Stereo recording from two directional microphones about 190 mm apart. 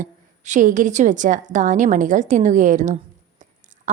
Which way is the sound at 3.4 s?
40° right (ahead or behind).